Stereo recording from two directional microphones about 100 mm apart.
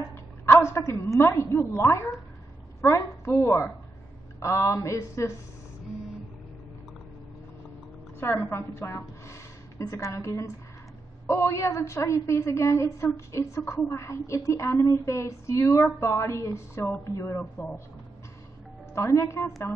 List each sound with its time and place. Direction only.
0.1 s a woman's voice: 25° left (ahead or behind)
8.2 s a woman's voice: 25° left (ahead or behind)
18.9 s a woman's voice: 30° left (ahead or behind)